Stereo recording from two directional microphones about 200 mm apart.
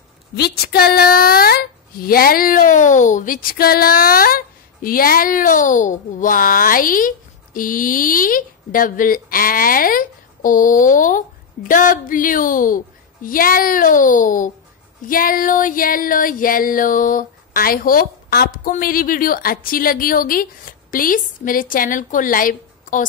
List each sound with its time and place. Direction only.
0.4 s a woman's voice: 50° left (ahead or behind)